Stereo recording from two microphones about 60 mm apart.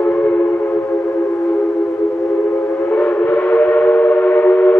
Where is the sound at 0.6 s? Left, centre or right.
Left.